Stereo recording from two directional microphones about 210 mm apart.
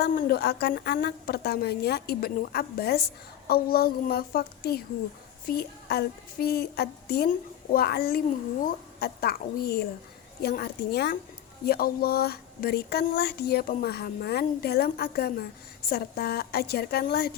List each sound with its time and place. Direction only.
0.0 s speech: 50° left (ahead or behind)